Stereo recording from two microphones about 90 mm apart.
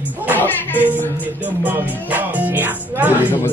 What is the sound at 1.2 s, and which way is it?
Music, 20° right (ahead or behind).